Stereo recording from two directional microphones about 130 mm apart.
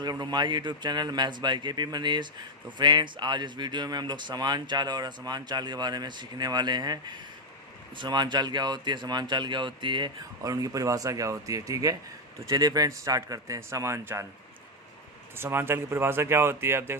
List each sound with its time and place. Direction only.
0.0 s speech: 30° right (ahead or behind)
10.4 s speech: 25° right (ahead or behind)
15.4 s speech: 15° right (ahead or behind)